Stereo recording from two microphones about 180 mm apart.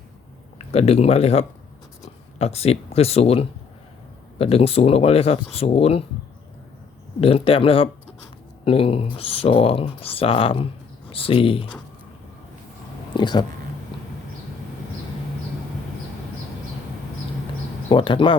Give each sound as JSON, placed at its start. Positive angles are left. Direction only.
{"t": 0.7, "sound": "speech", "side_deg": 35}
{"t": 7.2, "sound": "speech", "side_deg": 30}
{"t": 13.1, "sound": "a sound", "side_deg": 25}
{"t": 17.8, "sound": "speech", "side_deg": 30}